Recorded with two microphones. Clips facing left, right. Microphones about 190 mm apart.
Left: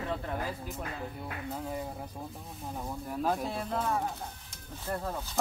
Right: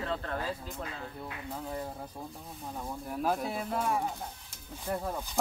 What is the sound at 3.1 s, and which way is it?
Speech, 5° right (ahead or behind).